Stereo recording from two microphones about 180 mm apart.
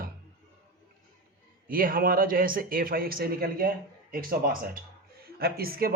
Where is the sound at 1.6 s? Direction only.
55° right (ahead or behind).